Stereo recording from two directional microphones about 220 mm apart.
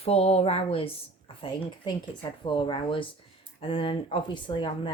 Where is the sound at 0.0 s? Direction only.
30° left (ahead or behind).